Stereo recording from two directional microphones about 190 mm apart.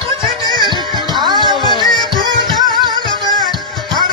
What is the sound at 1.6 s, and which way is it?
Music, 20° left (ahead or behind).